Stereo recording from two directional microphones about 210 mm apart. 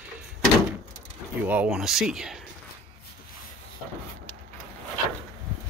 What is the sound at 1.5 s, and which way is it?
Speech, 5° right (ahead or behind).